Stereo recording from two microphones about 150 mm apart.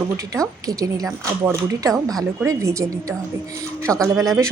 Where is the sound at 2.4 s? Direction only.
20° right (ahead or behind).